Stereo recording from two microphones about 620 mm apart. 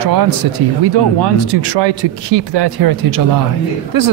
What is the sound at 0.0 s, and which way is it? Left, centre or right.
Speech, right.